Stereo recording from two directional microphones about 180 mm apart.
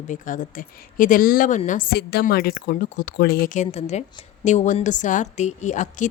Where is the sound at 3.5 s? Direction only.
40° left (ahead or behind).